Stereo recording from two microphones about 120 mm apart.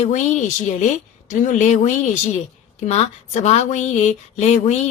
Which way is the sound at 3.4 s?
75° left (ahead or behind).